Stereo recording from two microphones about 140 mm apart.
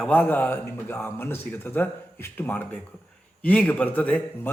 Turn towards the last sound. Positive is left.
turn(degrees=10)  # may be behind; listen again after turning